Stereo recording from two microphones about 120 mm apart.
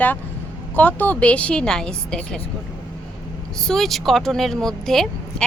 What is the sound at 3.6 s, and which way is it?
A woman's voice, 5° left (ahead or behind).